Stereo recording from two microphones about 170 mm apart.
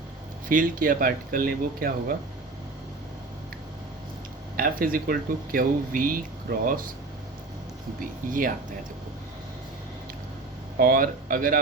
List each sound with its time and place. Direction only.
0.4 s speech: 55° right (ahead or behind)
4.6 s speech: 60° right (ahead or behind)
8.3 s speech: 55° right (ahead or behind)
10.8 s speech: 55° right (ahead or behind)